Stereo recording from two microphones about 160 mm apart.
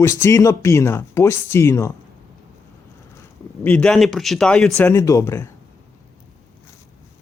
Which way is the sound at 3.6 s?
10° left (ahead or behind).